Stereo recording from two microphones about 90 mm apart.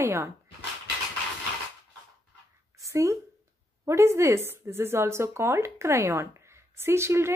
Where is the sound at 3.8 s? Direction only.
30° right (ahead or behind).